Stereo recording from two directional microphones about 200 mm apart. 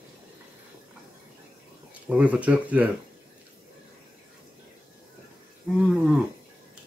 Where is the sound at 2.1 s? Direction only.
5° right (ahead or behind).